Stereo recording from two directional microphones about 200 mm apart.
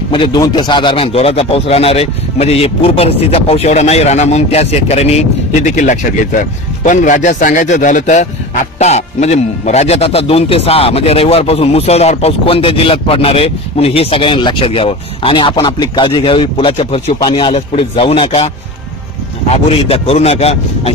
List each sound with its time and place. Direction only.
0.1 s a man's voice: 20° left (ahead or behind)
19.5 s speech: 30° left (ahead or behind)